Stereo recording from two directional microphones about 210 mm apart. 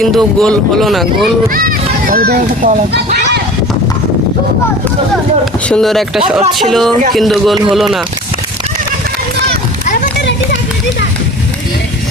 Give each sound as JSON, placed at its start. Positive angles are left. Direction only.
{"t": 0.0, "sound": "speech", "side_deg": 0}
{"t": 1.5, "sound": "a child's voice", "side_deg": -45}
{"t": 5.6, "sound": "speech", "side_deg": 5}